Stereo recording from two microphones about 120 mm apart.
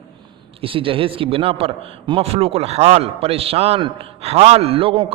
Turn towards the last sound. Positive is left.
turn(degrees=-50)  # may be behind; listen again after turning